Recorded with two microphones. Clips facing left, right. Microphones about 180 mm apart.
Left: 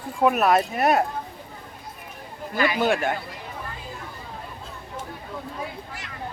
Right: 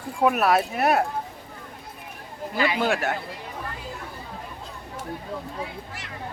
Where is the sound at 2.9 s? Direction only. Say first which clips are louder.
Left 2 dB; 5° right (ahead or behind).